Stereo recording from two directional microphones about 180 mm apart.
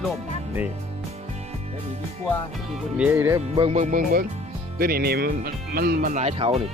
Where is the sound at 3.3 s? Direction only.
30° right (ahead or behind); by 6.2 s 55° right (ahead or behind).